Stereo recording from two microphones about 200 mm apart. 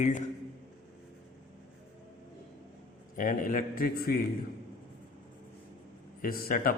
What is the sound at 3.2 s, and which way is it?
A man's voice, 40° left (ahead or behind).